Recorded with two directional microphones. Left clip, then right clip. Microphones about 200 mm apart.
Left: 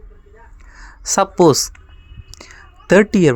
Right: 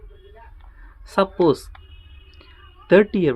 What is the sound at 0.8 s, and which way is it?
Speech, 45° left (ahead or behind).